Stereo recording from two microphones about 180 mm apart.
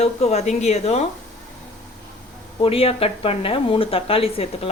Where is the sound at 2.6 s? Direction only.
30° left (ahead or behind).